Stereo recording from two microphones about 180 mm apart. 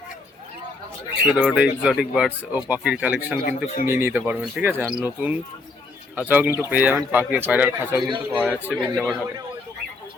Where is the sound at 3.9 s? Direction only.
10° right (ahead or behind).